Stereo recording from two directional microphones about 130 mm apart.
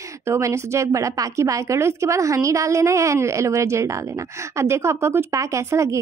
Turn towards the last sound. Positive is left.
turn(degrees=-25)  # may be behind; listen again after turning